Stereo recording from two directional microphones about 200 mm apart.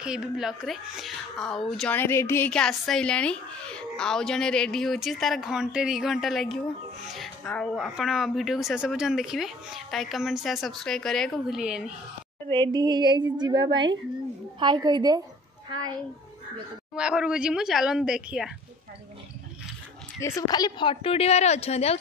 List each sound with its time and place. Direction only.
0.0 s a woman's voice: 5° right (ahead or behind)
12.5 s speech: 20° right (ahead or behind)
16.9 s a woman's voice: 5° right (ahead or behind)
20.2 s a woman's voice: 15° left (ahead or behind); by 21.9 s 30° left (ahead or behind)